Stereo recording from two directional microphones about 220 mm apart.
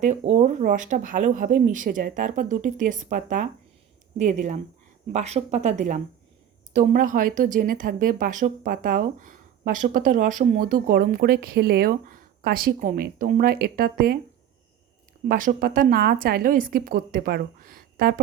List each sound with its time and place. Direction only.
0.0 s speech: 30° right (ahead or behind)
15.3 s speech: 40° right (ahead or behind)